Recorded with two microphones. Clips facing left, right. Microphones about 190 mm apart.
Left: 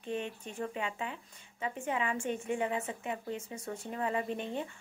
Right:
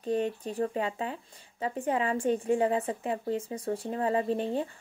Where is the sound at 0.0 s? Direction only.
35° right (ahead or behind).